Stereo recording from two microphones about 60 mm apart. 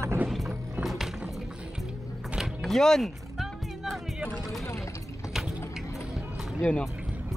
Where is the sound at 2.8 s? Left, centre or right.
Centre.